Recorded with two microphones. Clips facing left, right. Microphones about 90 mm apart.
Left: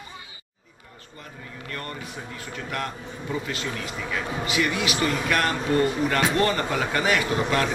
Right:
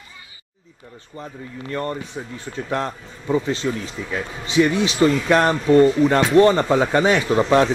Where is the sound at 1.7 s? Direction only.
25° right (ahead or behind).